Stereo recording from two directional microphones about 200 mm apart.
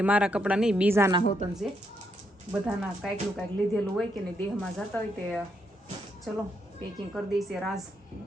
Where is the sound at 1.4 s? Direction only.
30° right (ahead or behind).